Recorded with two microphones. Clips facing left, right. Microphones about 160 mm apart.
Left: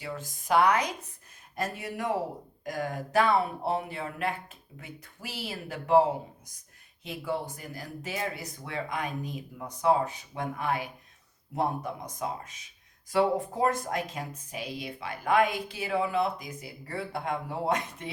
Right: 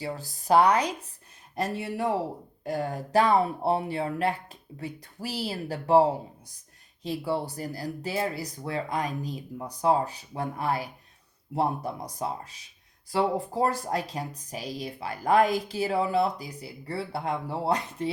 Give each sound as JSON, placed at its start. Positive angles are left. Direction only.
{"t": 0.0, "sound": "speech", "side_deg": -35}